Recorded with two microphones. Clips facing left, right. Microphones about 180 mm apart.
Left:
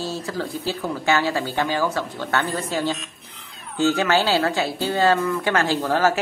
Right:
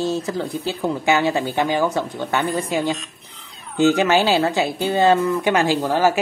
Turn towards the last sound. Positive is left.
turn(degrees=-15)  # may be behind; listen again after turning